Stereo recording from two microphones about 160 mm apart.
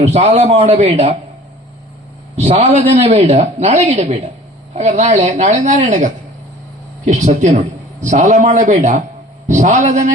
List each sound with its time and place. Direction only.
0.0 s a man's voice: 40° right (ahead or behind)
2.3 s a man's voice: 40° right (ahead or behind)